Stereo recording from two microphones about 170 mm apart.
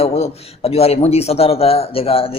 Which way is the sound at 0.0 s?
35° left (ahead or behind).